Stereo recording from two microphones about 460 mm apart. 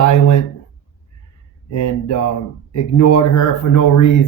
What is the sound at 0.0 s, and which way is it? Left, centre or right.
Speech, left.